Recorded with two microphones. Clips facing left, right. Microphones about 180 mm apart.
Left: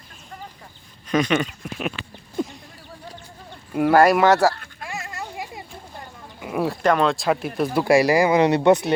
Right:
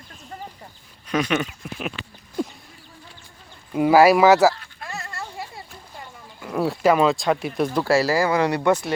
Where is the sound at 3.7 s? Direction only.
Centre (ahead or behind).